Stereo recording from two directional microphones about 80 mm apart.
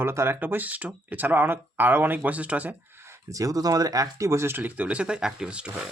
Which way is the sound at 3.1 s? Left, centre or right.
Right.